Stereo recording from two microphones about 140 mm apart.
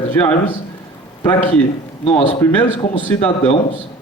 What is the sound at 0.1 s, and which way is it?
Speech, 10° left (ahead or behind).